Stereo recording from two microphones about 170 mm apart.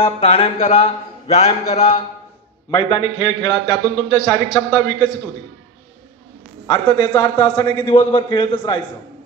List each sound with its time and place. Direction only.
0.0 s speech: 35° left (ahead or behind)
2.7 s a man's voice: 20° left (ahead or behind)
6.7 s a man's voice: 15° left (ahead or behind)
7.9 s speech: 30° left (ahead or behind)